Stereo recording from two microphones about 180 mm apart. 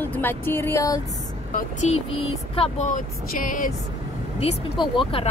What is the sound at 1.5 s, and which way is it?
Speech, 40° left (ahead or behind).